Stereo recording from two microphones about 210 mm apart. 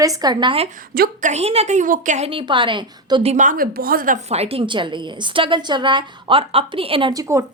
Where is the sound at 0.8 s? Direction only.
45° right (ahead or behind).